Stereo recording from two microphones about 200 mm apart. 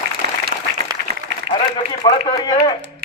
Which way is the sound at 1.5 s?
25° left (ahead or behind).